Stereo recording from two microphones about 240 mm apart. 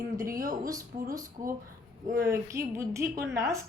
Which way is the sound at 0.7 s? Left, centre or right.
Centre.